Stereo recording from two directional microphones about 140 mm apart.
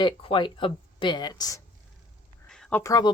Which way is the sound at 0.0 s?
35° left (ahead or behind).